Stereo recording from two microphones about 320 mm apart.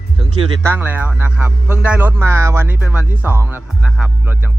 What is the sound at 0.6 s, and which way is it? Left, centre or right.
A man's voice, centre.